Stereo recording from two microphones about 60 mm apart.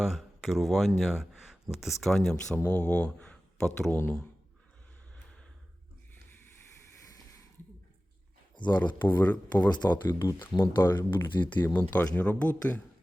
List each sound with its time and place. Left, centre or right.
0.0 s speech: centre
2.6 s speech: left
8.7 s speech: left
10.4 s speech: left